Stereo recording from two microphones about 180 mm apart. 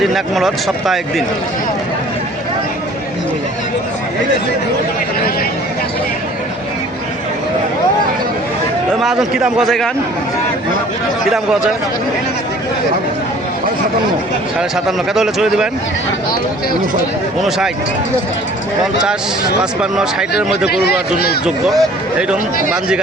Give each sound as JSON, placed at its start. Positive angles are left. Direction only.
{"t": 0.0, "sound": "speech", "side_deg": 0}
{"t": 9.0, "sound": "speech", "side_deg": 0}
{"t": 14.8, "sound": "speech", "side_deg": 0}
{"t": 19.8, "sound": "speech", "side_deg": -5}
{"t": 20.7, "sound": "speech", "side_deg": 65}
{"t": 21.4, "sound": "speech", "side_deg": 0}